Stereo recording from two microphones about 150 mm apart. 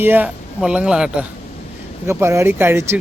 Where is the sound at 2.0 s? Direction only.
20° right (ahead or behind).